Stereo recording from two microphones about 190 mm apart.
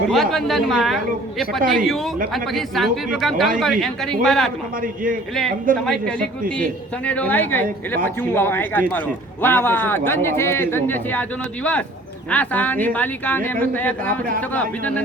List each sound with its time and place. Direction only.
0.1 s speech: centre (ahead or behind)
5.8 s speech: 5° left (ahead or behind)
6.1 s a man's voice: 50° right (ahead or behind)
7.0 s a man's voice: 5° left (ahead or behind)